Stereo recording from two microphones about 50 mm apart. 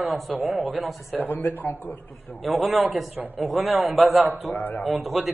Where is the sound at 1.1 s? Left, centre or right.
Left.